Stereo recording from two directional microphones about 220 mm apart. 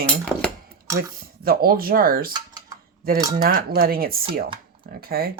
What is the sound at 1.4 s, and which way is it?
Speech, 40° right (ahead or behind).